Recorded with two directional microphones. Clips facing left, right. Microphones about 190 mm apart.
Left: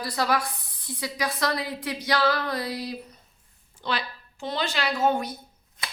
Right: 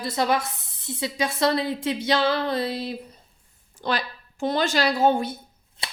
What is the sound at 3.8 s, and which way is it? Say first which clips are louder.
A woman's voice: right 3 dB; 45° right (ahead or behind).